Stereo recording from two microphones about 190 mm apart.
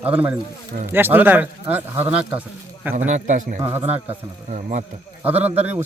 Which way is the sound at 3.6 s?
10° right (ahead or behind).